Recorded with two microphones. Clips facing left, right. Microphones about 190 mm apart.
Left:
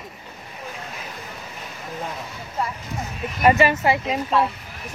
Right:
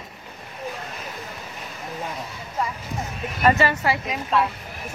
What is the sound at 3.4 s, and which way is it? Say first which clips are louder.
Speech: left 3 dB; 15° left (ahead or behind).